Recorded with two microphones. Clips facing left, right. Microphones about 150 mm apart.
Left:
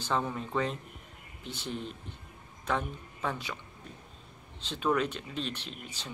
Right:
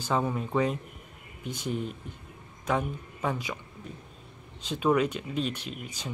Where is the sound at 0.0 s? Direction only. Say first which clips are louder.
Right 4 dB; 10° right (ahead or behind).